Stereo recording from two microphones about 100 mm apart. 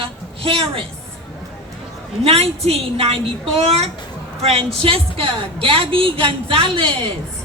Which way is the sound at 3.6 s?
90° right.